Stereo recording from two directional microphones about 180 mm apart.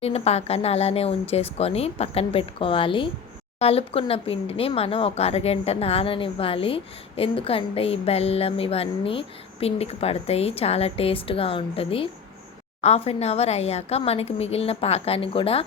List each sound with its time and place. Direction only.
0.0 s speech: 35° left (ahead or behind)